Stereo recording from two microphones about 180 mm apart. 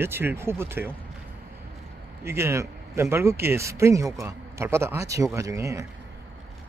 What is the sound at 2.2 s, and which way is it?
Speech, 15° right (ahead or behind).